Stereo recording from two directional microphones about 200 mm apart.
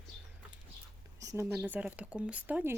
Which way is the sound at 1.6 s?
10° right (ahead or behind).